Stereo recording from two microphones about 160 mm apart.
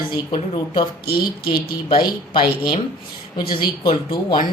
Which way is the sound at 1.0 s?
75° left (ahead or behind).